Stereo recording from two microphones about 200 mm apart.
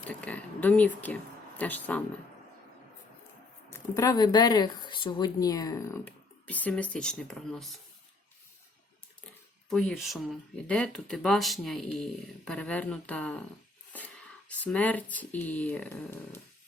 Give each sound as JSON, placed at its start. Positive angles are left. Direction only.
{"t": 0.0, "sound": "a sound", "side_deg": 5}
{"t": 3.7, "sound": "speech", "side_deg": 15}
{"t": 9.6, "sound": "speech", "side_deg": 0}
{"t": 14.5, "sound": "speech", "side_deg": 5}